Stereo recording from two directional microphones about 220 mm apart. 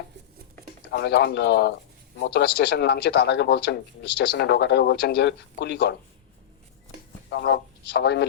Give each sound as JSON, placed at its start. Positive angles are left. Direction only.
{"t": 0.9, "sound": "speech", "side_deg": 50}
{"t": 7.3, "sound": "a man's voice", "side_deg": 50}